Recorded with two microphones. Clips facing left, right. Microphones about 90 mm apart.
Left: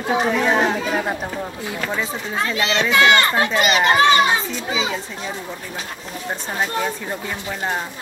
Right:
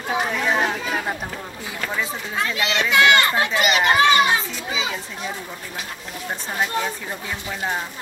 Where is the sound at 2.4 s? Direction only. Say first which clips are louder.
Left 3 dB; 30° left (ahead or behind).